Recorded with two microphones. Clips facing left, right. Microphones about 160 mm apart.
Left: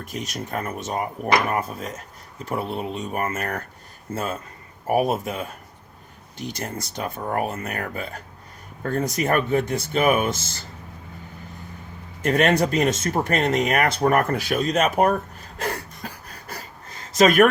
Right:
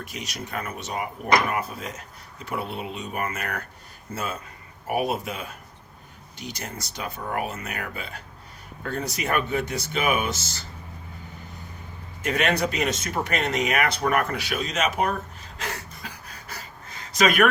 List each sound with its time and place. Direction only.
0.1 s speech: 45° left (ahead or behind)
12.2 s speech: 45° left (ahead or behind)